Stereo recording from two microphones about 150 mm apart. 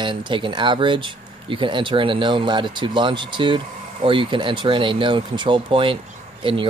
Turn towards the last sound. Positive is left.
turn(degrees=-35)  # may be behind; listen again after turning